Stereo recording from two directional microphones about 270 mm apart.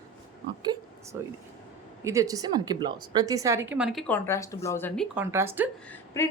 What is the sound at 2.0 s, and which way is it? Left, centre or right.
A woman's voice, centre.